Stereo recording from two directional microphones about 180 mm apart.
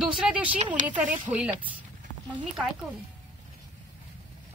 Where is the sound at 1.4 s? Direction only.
5° right (ahead or behind).